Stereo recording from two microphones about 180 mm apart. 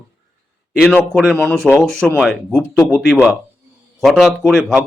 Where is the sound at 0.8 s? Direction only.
Centre (ahead or behind).